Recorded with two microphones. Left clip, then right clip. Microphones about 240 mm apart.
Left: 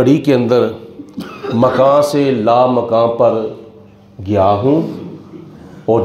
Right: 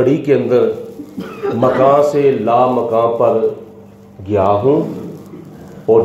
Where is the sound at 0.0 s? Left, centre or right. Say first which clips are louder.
Left 1 dB; left.